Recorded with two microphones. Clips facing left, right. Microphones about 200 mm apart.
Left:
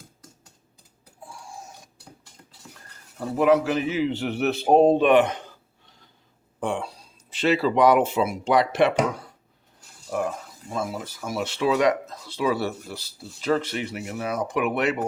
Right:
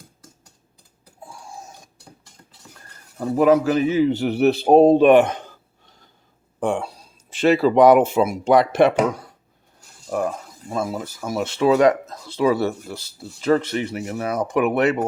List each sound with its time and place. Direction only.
3.3 s a man's voice: 40° right (ahead or behind)
6.6 s speech: 50° right (ahead or behind)
10.1 s speech: 50° right (ahead or behind)